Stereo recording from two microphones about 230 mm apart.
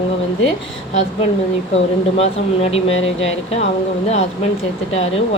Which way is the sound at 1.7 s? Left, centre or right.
Left.